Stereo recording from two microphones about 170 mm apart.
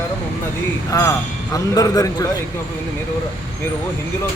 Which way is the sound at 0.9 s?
20° left (ahead or behind).